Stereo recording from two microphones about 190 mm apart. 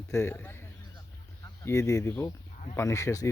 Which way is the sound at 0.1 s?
15° left (ahead or behind).